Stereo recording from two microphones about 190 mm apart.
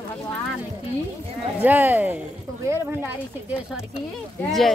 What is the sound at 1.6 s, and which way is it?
Speech, 10° right (ahead or behind).